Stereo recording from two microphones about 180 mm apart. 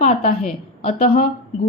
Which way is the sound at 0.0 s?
35° left (ahead or behind).